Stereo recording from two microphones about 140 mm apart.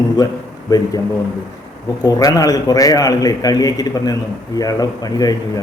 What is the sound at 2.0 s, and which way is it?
Speech, 25° left (ahead or behind).